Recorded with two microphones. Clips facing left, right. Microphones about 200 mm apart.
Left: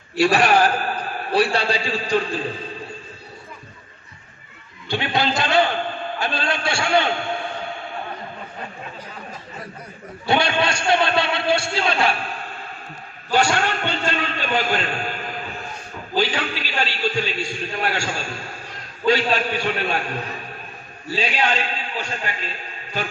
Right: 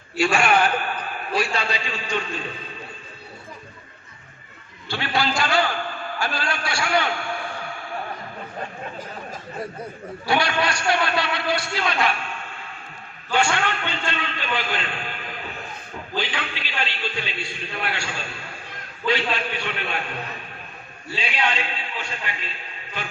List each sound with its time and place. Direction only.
0.2 s a man's voice: 35° left (ahead or behind)
4.9 s a man's voice: 20° left (ahead or behind)
10.2 s a man's voice: 25° left (ahead or behind); by 20.1 s 40° left (ahead or behind)
21.2 s a man's voice: 40° left (ahead or behind)